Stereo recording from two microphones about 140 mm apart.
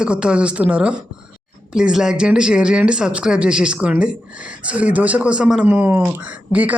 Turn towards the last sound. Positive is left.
turn(degrees=-10)  # may be behind; listen again after turning